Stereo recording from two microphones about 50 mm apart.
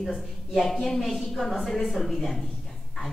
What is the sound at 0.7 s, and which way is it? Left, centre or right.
A woman's voice, centre.